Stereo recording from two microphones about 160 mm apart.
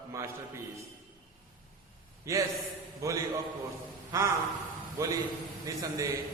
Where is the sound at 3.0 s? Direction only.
20° right (ahead or behind).